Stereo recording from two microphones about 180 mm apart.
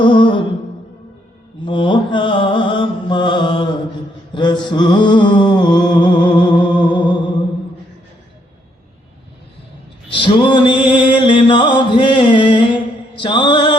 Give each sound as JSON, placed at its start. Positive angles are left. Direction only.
{"t": 0.0, "sound": "music", "side_deg": 25}
{"t": 1.6, "sound": "mantra", "side_deg": 25}
{"t": 4.4, "sound": "music", "side_deg": 25}
{"t": 10.1, "sound": "music", "side_deg": 25}
{"t": 13.1, "sound": "mantra", "side_deg": 25}